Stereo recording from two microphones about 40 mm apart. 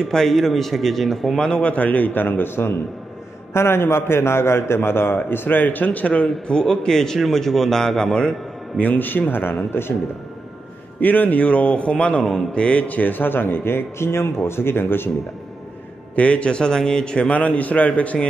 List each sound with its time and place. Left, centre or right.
0.0 s a man's voice: centre
1.6 s a man's voice: left
3.5 s a man's voice: left
5.9 s a man's voice: left
6.4 s speech: centre
8.7 s a man's voice: left
11.0 s a man's voice: left
12.6 s speech: left
16.2 s a man's voice: left
17.3 s a man's voice: left